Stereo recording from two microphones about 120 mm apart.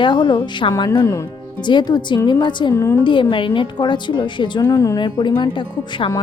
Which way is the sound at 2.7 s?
25° left (ahead or behind).